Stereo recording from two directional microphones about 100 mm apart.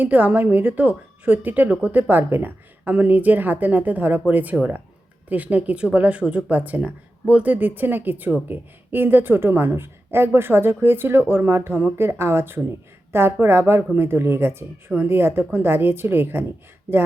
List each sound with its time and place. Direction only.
0.0 s a woman's voice: 15° right (ahead or behind)